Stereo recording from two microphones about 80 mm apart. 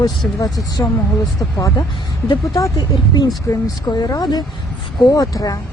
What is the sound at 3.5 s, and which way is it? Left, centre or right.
Speech, left.